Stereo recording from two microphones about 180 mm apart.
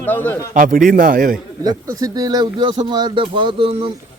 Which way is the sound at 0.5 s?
50° right (ahead or behind).